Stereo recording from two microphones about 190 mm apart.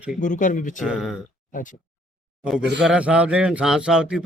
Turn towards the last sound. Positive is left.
turn(degrees=-5)  # may be behind; listen again after turning